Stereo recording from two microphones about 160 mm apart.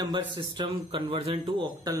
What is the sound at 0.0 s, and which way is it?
Speech, 30° right (ahead or behind).